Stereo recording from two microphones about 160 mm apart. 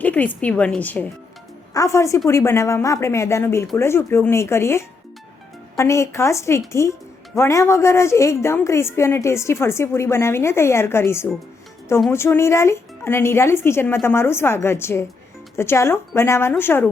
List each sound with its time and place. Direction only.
0.0 s a woman's voice: 10° left (ahead or behind)